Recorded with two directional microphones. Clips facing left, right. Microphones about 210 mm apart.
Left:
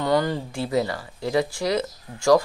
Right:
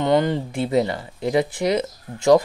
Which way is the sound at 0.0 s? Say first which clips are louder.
Right 3 dB; 20° right (ahead or behind).